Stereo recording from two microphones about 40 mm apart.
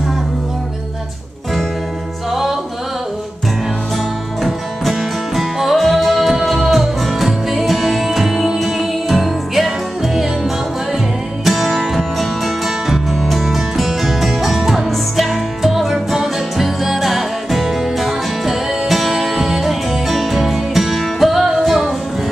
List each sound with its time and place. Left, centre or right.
3.9 s music: centre